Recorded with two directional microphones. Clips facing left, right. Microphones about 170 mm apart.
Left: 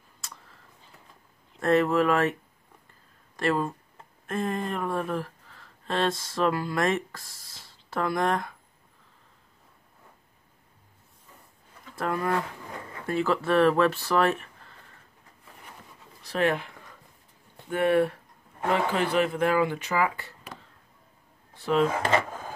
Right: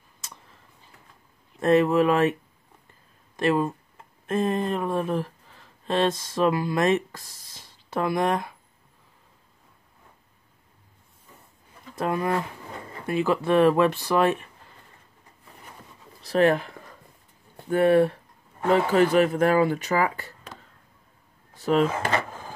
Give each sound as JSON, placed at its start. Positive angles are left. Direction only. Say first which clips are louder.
{"t": 1.6, "sound": "speech", "louder": "right 3 dB", "side_deg": -20}
{"t": 3.3, "sound": "speech", "louder": "right 3 dB", "side_deg": -20}
{"t": 11.9, "sound": "speech", "louder": "right 2 dB", "side_deg": -20}
{"t": 16.2, "sound": "speech", "louder": "right 5 dB", "side_deg": -35}
{"t": 18.9, "sound": "speech", "louder": "right 6 dB", "side_deg": -45}
{"t": 21.5, "sound": "speech", "louder": "right 2 dB", "side_deg": -45}